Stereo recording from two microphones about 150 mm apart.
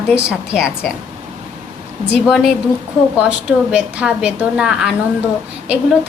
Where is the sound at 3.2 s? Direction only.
10° right (ahead or behind).